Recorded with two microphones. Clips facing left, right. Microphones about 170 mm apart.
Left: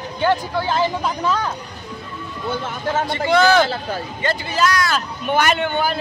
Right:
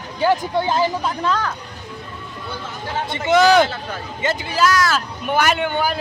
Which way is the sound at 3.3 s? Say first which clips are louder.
Right 2 dB; 15° right (ahead or behind).